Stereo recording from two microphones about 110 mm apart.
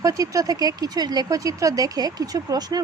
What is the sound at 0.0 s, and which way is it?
Speech, 30° right (ahead or behind).